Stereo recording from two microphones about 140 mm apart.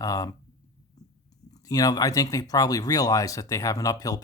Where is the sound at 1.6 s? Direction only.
25° left (ahead or behind).